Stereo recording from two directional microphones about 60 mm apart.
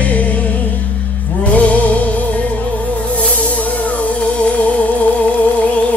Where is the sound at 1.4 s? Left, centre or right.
Left.